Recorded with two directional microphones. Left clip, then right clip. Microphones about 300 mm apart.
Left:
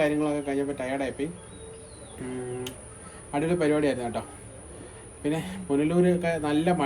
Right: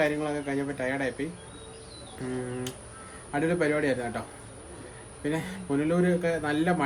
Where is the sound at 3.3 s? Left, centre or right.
Centre.